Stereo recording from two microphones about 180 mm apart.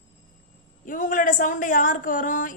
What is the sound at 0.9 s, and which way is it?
A woman's voice, 45° left (ahead or behind).